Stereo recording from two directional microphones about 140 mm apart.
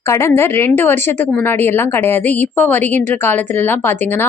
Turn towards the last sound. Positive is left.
turn(degrees=15)  # may be behind; listen again after turning